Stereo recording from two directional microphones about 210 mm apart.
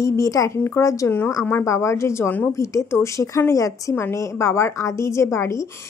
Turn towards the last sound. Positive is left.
turn(degrees=15)  # may be behind; listen again after turning